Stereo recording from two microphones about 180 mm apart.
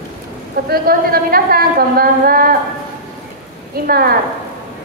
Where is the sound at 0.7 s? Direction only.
55° right (ahead or behind).